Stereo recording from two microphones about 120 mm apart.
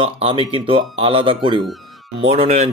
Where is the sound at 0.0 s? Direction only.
50° right (ahead or behind).